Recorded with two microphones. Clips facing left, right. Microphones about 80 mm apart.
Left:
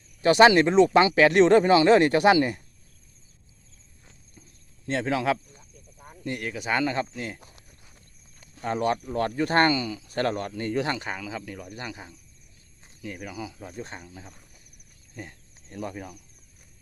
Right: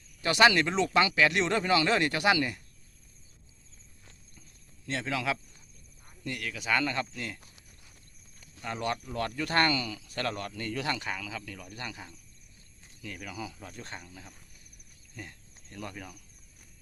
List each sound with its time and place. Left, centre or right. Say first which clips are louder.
0.2 s speech: left 7 dB; left
4.9 s speech: left 7 dB; left
8.6 s speech: left 7 dB; left
12.8 s cricket: left 5 dB; left
13.1 s speech: left 1 dB; centre